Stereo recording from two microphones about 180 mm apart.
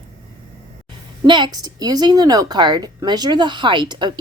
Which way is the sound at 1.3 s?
25° right (ahead or behind).